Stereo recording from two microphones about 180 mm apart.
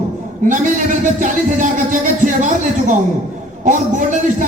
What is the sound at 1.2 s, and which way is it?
Speech, 45° right (ahead or behind).